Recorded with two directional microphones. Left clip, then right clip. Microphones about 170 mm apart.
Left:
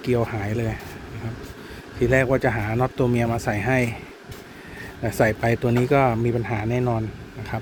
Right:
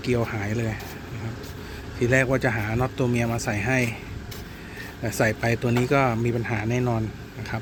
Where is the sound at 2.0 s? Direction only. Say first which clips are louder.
Left 2 dB; 15° left (ahead or behind).